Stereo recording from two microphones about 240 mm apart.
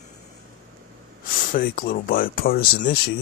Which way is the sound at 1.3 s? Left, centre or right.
Left.